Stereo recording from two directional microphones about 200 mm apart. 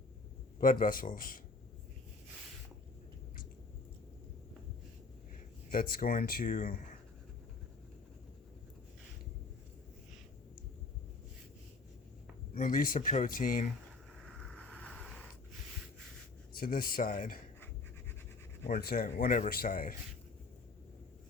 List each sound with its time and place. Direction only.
0.6 s speech: 45° left (ahead or behind)
5.7 s speech: 45° left (ahead or behind)
12.5 s speech: 45° left (ahead or behind)
14.3 s a sound: 5° left (ahead or behind)
16.6 s speech: 45° left (ahead or behind)
18.7 s speech: 45° left (ahead or behind)